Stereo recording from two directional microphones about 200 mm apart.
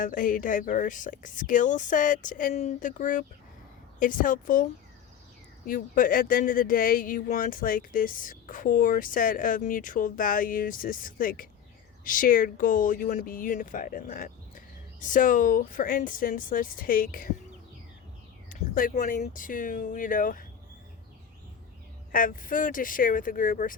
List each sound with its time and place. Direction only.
0.0 s speech: 40° left (ahead or behind)
18.4 s speech: 45° left (ahead or behind)
22.1 s speech: 45° left (ahead or behind)